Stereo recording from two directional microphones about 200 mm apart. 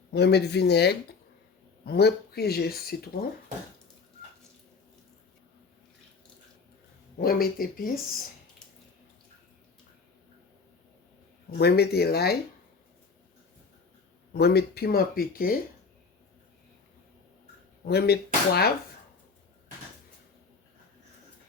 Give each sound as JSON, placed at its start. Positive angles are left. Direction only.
{"t": 0.1, "sound": "speech", "side_deg": 55}
{"t": 7.2, "sound": "speech", "side_deg": 50}
{"t": 11.5, "sound": "speech", "side_deg": 55}
{"t": 14.3, "sound": "speech", "side_deg": 55}
{"t": 17.8, "sound": "speech", "side_deg": 55}